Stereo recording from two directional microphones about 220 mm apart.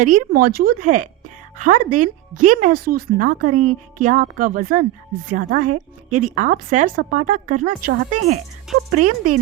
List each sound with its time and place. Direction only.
0.0 s speech: 40° right (ahead or behind)
8.7 s insect: centre (ahead or behind)
9.0 s insect: 90° right